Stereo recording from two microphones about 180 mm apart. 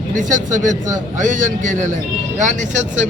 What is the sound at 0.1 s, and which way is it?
Speech, 45° right (ahead or behind).